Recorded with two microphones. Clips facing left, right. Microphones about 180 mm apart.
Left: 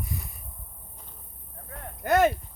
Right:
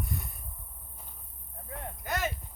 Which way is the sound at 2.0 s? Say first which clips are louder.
Left 13 dB; 60° left (ahead or behind).